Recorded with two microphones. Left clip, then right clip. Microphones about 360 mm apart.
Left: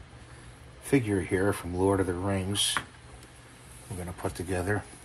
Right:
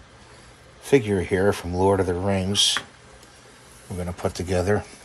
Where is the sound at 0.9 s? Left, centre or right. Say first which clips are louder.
Right 7 dB; right.